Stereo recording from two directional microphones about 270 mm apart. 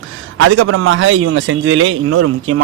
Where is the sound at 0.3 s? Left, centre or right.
Right.